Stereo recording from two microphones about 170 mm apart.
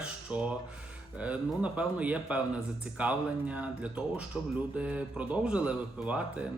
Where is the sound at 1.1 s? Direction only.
10° right (ahead or behind).